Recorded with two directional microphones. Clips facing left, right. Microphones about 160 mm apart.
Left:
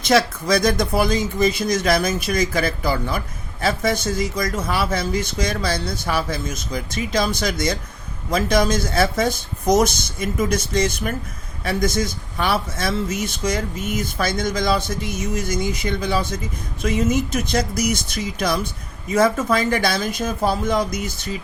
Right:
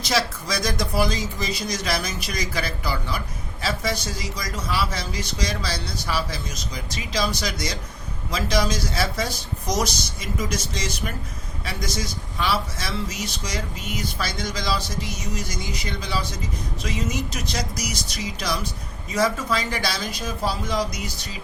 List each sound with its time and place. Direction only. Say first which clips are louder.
0.0 s speech: left 7 dB; 55° left (ahead or behind)